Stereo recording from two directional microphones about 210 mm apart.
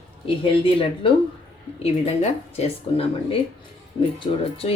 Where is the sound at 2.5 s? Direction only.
30° left (ahead or behind).